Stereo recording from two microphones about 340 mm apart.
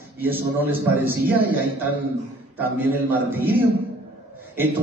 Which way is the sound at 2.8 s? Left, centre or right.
Centre.